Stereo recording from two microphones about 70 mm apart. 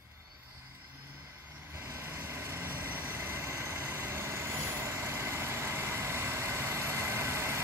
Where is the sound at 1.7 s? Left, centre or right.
Right.